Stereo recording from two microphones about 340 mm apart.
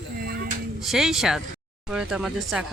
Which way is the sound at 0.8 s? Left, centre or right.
Centre.